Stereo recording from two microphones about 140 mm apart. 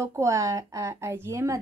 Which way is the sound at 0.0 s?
20° right (ahead or behind).